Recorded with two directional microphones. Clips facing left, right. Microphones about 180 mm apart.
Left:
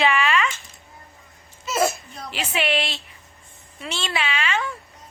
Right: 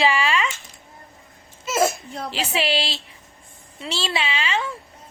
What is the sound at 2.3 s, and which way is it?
A child's voice, 30° right (ahead or behind).